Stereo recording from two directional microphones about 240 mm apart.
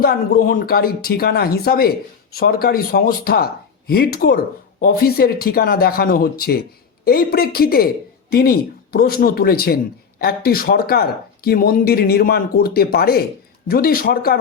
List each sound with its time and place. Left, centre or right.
0.0 s speech: left